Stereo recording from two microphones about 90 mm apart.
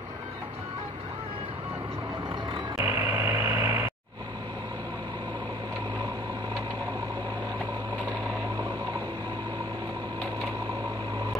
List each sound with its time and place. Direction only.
2.8 s vehicle: 20° right (ahead or behind)